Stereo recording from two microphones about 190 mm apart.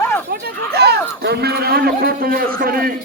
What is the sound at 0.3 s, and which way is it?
A man's voice, 55° right (ahead or behind).